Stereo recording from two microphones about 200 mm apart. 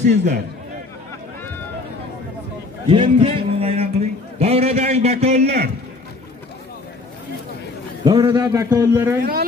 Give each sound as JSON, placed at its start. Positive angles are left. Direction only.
{"t": 0.0, "sound": "a man's voice", "side_deg": -35}
{"t": 2.9, "sound": "a man's voice", "side_deg": -25}
{"t": 8.0, "sound": "a man's voice", "side_deg": -20}
{"t": 9.2, "sound": "speech", "side_deg": -50}